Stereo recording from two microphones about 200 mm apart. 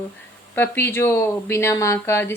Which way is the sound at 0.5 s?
10° left (ahead or behind).